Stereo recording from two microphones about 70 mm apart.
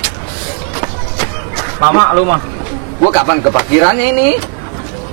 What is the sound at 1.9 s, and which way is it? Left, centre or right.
Speech, right.